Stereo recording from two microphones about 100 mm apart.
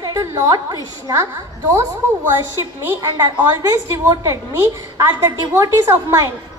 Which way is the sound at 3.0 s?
45° right (ahead or behind).